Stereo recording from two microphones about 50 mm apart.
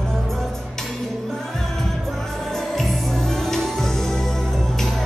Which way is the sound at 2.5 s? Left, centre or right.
Centre.